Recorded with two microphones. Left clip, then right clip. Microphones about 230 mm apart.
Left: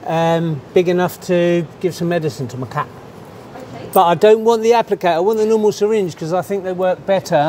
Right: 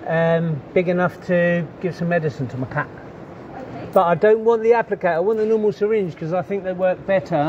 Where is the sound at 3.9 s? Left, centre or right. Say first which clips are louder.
Left 4 dB; left.